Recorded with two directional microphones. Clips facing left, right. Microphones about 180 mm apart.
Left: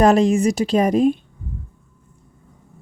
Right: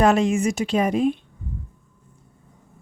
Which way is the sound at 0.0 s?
35° left (ahead or behind).